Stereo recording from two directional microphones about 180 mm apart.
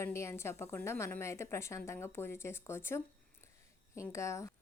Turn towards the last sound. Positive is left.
turn(degrees=15)  # may be behind; listen again after turning